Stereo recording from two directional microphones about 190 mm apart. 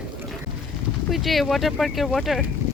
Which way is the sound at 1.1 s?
Centre (ahead or behind).